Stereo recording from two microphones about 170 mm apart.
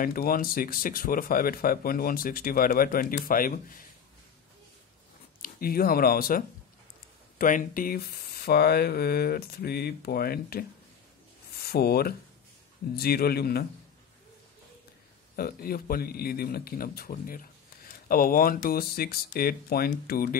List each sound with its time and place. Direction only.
0.0 s speech: 60° left (ahead or behind)
5.4 s speech: 60° left (ahead or behind)
11.6 s a man's voice: 65° left (ahead or behind)
15.3 s speech: 60° left (ahead or behind)